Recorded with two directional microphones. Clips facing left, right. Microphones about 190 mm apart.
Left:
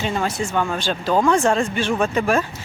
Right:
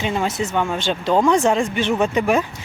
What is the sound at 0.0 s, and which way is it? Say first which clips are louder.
Speech: right 1 dB; 15° right (ahead or behind).